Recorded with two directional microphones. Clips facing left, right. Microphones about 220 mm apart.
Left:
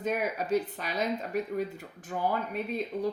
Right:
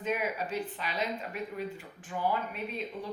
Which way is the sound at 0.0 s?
45° left (ahead or behind).